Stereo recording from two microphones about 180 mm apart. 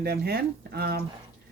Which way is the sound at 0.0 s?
60° right (ahead or behind).